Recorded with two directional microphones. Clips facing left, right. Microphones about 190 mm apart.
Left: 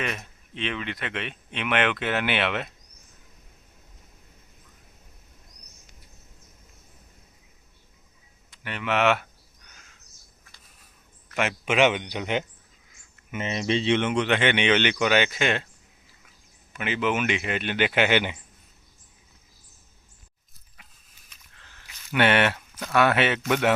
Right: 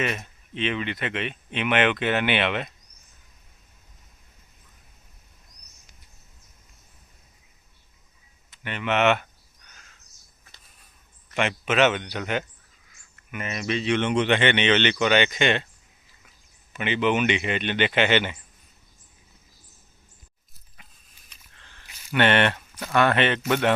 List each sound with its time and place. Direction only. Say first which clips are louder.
0.0 s speech: right 3 dB; centre (ahead or behind)
8.4 s speech: right 1 dB; centre (ahead or behind)
11.3 s speech: even; 10° left (ahead or behind); by 14.0 s 25° left (ahead or behind)
14.0 s speech: right 2 dB; centre (ahead or behind)
16.7 s speech: right 3 dB; 5° left (ahead or behind)
22.1 s speech: right 1 dB; 10° left (ahead or behind)
22.7 s a sound: right 1 dB; 5° right (ahead or behind)
23.0 s speech: even; 5° left (ahead or behind)